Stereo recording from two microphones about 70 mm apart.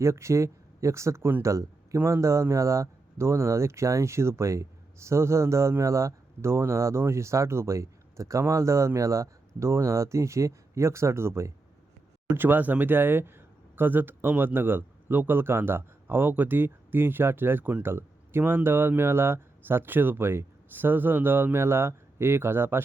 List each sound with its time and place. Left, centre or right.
0.0 s speech: right
12.4 s speech: right